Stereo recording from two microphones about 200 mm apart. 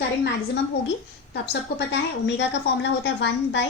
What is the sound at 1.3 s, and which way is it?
A woman's voice, 55° left (ahead or behind).